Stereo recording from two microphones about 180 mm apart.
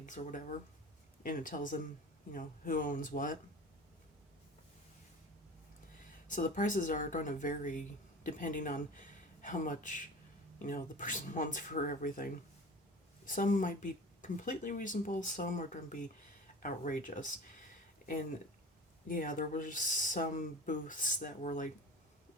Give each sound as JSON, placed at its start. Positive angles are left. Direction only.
{"t": 0.0, "sound": "speech", "side_deg": 45}
{"t": 6.2, "sound": "speech", "side_deg": 45}
{"t": 19.0, "sound": "speech", "side_deg": 50}